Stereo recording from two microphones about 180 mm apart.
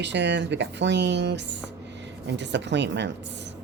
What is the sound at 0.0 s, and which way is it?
Speech, 75° right (ahead or behind).